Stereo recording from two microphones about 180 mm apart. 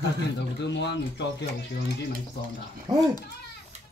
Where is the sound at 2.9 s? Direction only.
20° right (ahead or behind).